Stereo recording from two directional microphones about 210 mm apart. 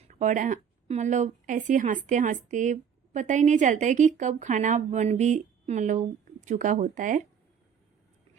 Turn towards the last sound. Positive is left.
turn(degrees=-35)  # may be behind; listen again after turning